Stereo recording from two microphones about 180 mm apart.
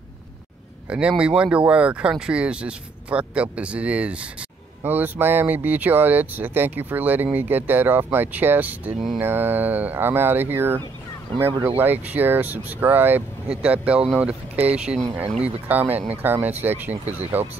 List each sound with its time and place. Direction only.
0.8 s speech: 5° right (ahead or behind)
11.8 s speech: 10° right (ahead or behind)
17.4 s speech: 35° right (ahead or behind)